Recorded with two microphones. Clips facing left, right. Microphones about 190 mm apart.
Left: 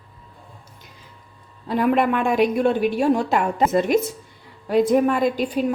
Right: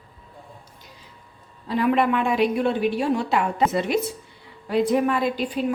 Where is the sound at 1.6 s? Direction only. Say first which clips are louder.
Left 2 dB; 50° left (ahead or behind).